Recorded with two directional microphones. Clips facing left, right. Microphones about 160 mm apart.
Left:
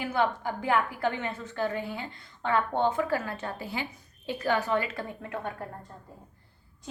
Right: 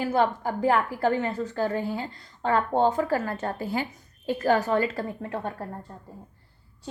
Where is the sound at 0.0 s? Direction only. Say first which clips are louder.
Right 4 dB; 40° right (ahead or behind).